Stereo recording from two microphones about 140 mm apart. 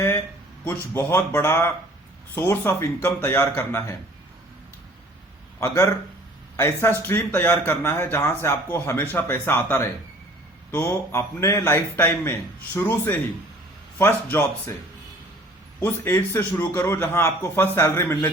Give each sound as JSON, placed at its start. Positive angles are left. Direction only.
{"t": 0.6, "sound": "speech", "side_deg": 15}
{"t": 5.5, "sound": "a man's voice", "side_deg": 20}
{"t": 15.8, "sound": "speech", "side_deg": 20}